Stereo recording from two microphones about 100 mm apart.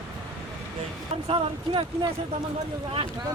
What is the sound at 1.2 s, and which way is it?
Speech, 70° right (ahead or behind).